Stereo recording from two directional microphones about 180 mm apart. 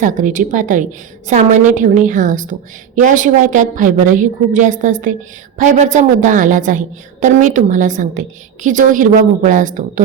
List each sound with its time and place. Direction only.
0.0 s a woman's voice: 45° right (ahead or behind)